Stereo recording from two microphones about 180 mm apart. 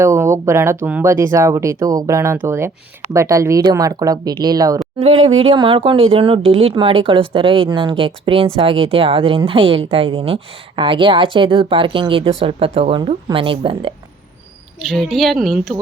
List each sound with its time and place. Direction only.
0.0 s speech: 15° right (ahead or behind)
5.4 s speech: 30° right (ahead or behind)
14.8 s speech: centre (ahead or behind)